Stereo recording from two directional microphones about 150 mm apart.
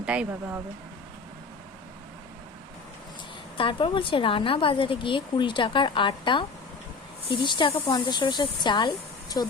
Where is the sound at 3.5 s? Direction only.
35° left (ahead or behind).